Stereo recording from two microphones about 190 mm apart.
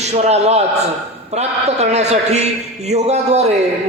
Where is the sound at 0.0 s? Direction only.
35° right (ahead or behind).